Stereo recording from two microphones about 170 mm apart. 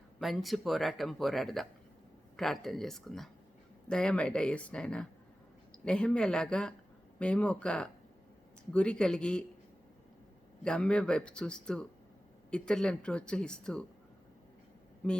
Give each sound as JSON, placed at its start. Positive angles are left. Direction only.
{"t": 0.2, "sound": "speech", "side_deg": 0}
{"t": 10.6, "sound": "speech", "side_deg": 5}
{"t": 15.0, "sound": "speech", "side_deg": 5}